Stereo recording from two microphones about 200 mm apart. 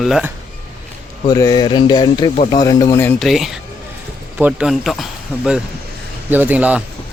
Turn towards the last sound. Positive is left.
turn(degrees=-5)  # may be behind; listen again after turning